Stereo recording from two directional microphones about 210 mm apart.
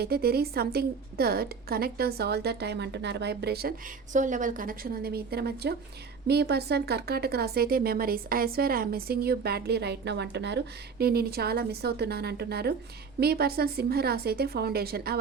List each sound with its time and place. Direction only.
0.0 s speech: 45° right (ahead or behind)